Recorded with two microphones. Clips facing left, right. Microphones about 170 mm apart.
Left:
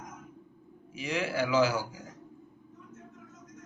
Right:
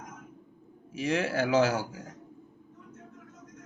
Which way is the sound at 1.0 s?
45° right (ahead or behind).